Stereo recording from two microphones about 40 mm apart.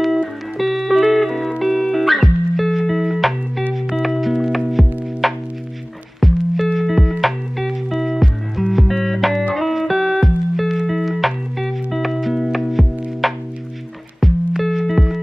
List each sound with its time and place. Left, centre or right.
0.0 s music: centre